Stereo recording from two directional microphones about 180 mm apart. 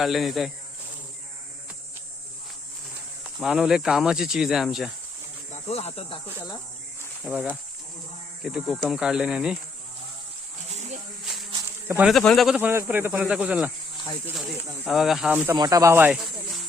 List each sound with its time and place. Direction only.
0.0 s speech: centre (ahead or behind)
3.4 s speech: centre (ahead or behind)
5.5 s speech: 35° left (ahead or behind)
7.3 s speech: 5° right (ahead or behind)
8.4 s speech: centre (ahead or behind)
11.9 s speech: 10° right (ahead or behind)
12.1 s speech: centre (ahead or behind)
14.8 s speech: centre (ahead or behind)
15.5 s speech: 20° right (ahead or behind)